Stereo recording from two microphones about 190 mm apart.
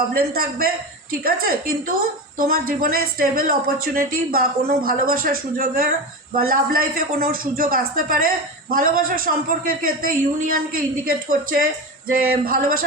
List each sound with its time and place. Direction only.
0.1 s a man's voice: 50° right (ahead or behind)